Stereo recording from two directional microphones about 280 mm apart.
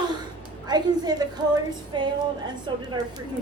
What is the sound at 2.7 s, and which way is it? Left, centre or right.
Speech, centre.